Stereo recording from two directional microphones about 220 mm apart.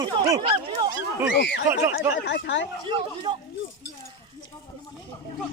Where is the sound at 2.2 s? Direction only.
55° left (ahead or behind).